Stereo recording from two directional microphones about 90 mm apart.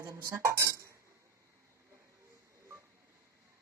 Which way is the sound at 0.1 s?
35° right (ahead or behind).